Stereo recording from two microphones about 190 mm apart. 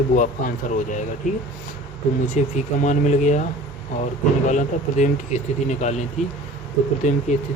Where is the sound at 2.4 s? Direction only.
40° left (ahead or behind).